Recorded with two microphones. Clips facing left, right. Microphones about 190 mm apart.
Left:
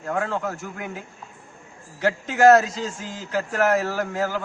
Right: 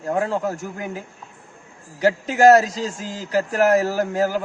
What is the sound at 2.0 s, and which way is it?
A man's voice, 35° right (ahead or behind).